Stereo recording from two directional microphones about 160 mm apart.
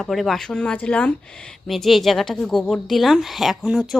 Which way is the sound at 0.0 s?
Centre (ahead or behind).